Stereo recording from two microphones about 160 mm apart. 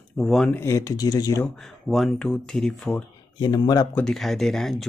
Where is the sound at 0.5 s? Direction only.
15° left (ahead or behind).